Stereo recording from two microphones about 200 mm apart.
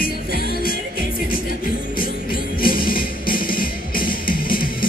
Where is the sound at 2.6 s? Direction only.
45° left (ahead or behind).